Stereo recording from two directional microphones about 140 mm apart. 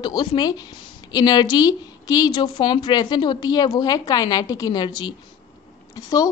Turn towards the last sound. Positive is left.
turn(degrees=25)  # may be behind; listen again after turning